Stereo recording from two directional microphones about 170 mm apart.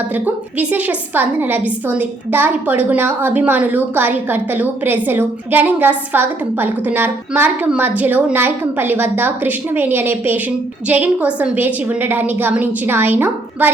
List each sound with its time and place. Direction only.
0.1 s a woman's voice: 10° right (ahead or behind)